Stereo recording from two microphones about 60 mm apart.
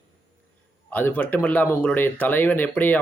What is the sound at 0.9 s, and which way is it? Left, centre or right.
Speech, left.